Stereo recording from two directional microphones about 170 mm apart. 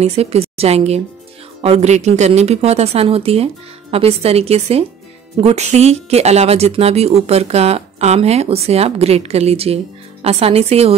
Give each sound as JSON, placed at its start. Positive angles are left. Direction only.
{"t": 0.0, "sound": "a woman's voice", "side_deg": -35}